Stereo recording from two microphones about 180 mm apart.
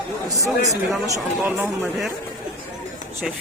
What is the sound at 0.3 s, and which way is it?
Speech, 20° right (ahead or behind).